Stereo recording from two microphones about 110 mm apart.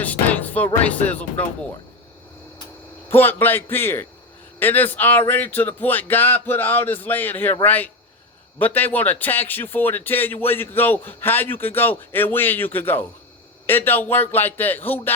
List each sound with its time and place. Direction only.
0.0 s speech: 15° left (ahead or behind)
3.1 s a man's voice: 20° left (ahead or behind)